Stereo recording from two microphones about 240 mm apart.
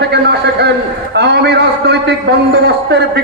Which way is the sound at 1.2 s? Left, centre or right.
Right.